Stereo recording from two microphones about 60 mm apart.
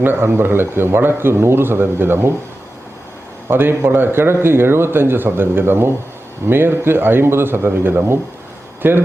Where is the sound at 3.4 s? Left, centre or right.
Right.